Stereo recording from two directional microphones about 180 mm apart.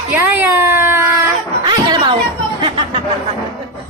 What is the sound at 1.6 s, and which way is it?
Chatter, 25° right (ahead or behind).